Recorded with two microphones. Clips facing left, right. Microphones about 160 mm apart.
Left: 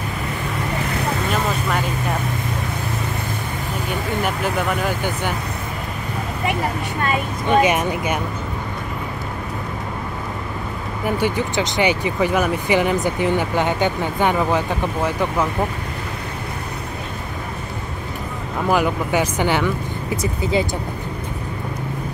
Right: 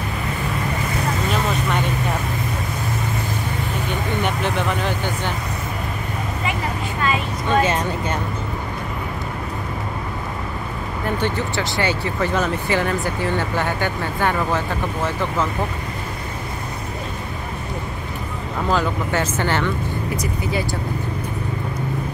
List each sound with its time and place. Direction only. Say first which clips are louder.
4.2 s speech: left 1 dB; 5° left (ahead or behind)
7.4 s speech: left 3 dB; 15° left (ahead or behind)
11.1 s speech: left 3 dB; 10° left (ahead or behind)
18.7 s speech: left 3 dB; 15° left (ahead or behind)